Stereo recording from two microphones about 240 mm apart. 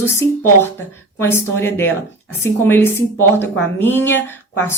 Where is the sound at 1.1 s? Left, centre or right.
Centre.